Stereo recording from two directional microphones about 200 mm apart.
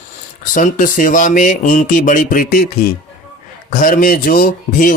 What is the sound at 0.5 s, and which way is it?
Speech, 40° left (ahead or behind).